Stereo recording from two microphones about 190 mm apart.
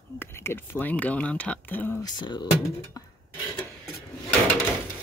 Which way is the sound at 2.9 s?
20° left (ahead or behind).